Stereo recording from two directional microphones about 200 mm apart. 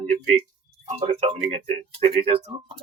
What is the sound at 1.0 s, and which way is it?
Speech, 35° right (ahead or behind).